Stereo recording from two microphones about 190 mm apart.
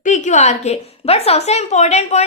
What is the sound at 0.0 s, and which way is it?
A child's voice, 40° left (ahead or behind).